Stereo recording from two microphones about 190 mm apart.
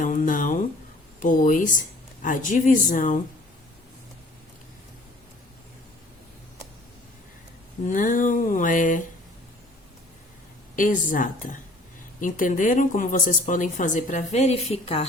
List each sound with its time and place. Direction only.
0.0 s speech: 45° left (ahead or behind)
7.9 s speech: 45° left (ahead or behind)
10.8 s speech: 45° left (ahead or behind)